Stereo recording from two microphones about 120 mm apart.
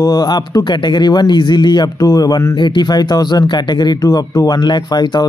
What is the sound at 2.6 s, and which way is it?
Speech, 40° left (ahead or behind).